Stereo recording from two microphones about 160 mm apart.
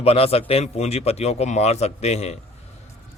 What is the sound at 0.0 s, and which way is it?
Speech, 35° left (ahead or behind).